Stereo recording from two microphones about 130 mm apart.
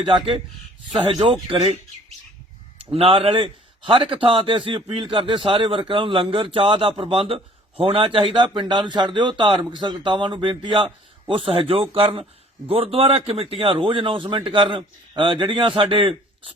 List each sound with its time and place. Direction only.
0.0 s a man's voice: 45° right (ahead or behind)
2.9 s a man's voice: 50° right (ahead or behind)